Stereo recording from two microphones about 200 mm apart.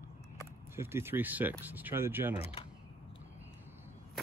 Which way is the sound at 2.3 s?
30° left (ahead or behind).